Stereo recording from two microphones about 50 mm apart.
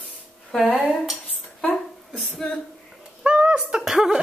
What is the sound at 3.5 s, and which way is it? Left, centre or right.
Speech, centre.